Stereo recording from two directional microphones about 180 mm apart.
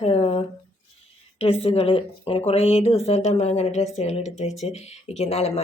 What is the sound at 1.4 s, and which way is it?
Speech, 30° left (ahead or behind).